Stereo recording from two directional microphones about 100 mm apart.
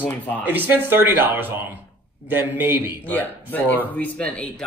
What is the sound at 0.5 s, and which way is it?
Speech, 20° right (ahead or behind).